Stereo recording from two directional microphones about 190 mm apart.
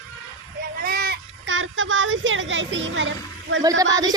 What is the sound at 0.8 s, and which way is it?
Speech, 50° right (ahead or behind).